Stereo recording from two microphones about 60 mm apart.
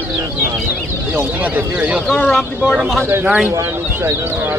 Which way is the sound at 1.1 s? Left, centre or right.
Right.